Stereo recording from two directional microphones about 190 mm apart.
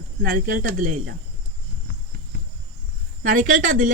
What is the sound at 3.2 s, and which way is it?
Speech, 45° right (ahead or behind).